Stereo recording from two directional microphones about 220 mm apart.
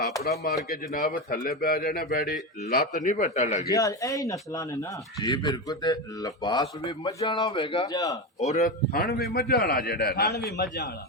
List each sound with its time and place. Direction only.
0.7 s a man's voice: 40° left (ahead or behind)
3.7 s a man's voice: 15° left (ahead or behind)
8.4 s a man's voice: 30° left (ahead or behind)
8.9 s a man's voice: 45° left (ahead or behind)